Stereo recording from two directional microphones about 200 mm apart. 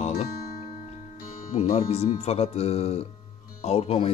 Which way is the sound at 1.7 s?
30° left (ahead or behind).